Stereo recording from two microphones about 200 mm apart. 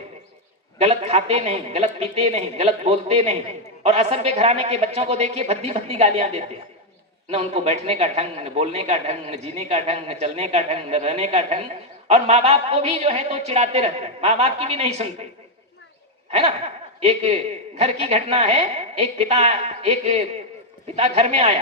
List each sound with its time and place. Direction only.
0.8 s a man's voice: 30° right (ahead or behind)
17.0 s a man's voice: 30° right (ahead or behind)